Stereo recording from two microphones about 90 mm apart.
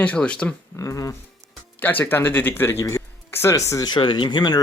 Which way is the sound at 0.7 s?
35° left (ahead or behind).